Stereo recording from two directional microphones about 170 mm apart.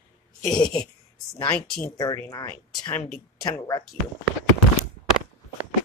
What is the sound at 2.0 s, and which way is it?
Speech, 20° left (ahead or behind).